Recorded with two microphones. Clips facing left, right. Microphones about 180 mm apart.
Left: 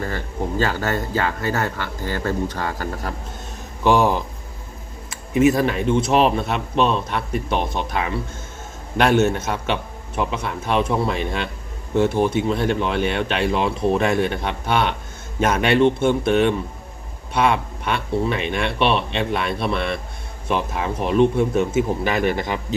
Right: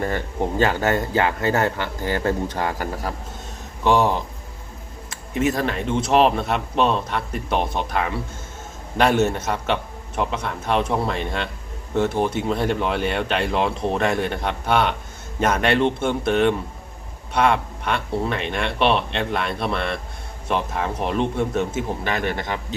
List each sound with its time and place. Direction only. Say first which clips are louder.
0.6 s speech: right 3 dB; 20° right (ahead or behind)
3.8 s speech: left 1 dB; 5° left (ahead or behind)
5.3 s speech: left 5 dB; 10° left (ahead or behind)